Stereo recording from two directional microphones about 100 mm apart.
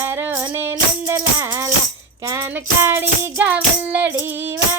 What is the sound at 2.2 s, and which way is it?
Music, 25° right (ahead or behind).